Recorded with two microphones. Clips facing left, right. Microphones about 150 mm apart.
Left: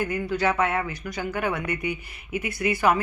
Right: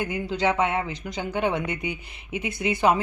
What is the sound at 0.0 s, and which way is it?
Speech, 20° right (ahead or behind).